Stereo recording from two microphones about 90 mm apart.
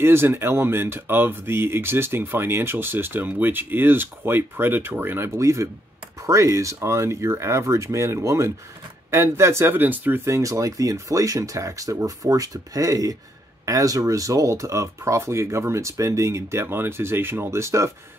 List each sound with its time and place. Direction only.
0.0 s speech: 25° right (ahead or behind)